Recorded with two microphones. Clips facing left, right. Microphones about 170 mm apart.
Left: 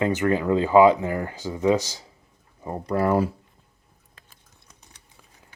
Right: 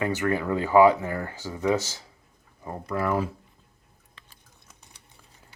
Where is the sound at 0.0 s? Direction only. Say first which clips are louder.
Left 4 dB; 20° left (ahead or behind).